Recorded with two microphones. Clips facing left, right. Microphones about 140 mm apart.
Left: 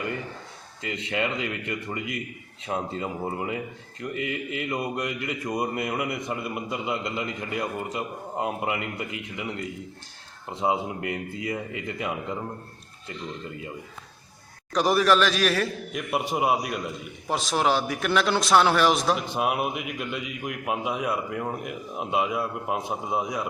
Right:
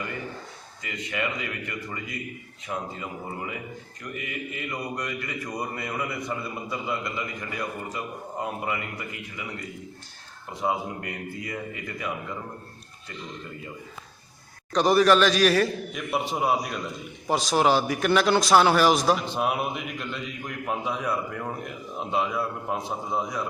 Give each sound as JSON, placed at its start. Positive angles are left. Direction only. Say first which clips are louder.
{"t": 0.9, "sound": "a man's voice", "louder": "left 3 dB", "side_deg": 25}
{"t": 10.6, "sound": "a man's voice", "louder": "left 2 dB", "side_deg": 20}
{"t": 14.7, "sound": "a man's voice", "louder": "right 2 dB", "side_deg": 5}